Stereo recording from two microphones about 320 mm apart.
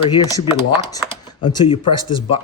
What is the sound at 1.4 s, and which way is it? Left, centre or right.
Speech, centre.